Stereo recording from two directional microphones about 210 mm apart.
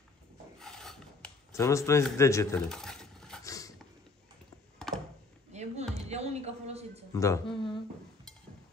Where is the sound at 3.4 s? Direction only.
15° left (ahead or behind).